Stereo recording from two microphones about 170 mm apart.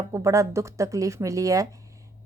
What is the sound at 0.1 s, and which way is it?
A woman's voice, 20° right (ahead or behind).